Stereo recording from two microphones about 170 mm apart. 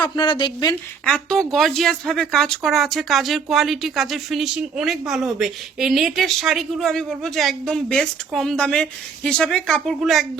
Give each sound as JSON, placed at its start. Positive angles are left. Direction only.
{"t": 0.0, "sound": "speech", "side_deg": 25}
{"t": 1.0, "sound": "speech", "side_deg": 5}